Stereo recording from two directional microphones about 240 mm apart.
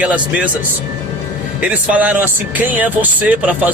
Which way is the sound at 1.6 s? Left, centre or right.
Centre.